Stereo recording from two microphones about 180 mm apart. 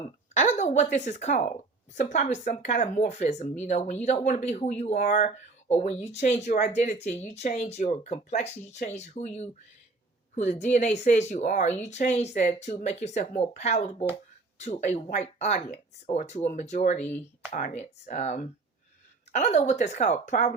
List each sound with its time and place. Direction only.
0.0 s speech: 40° left (ahead or behind)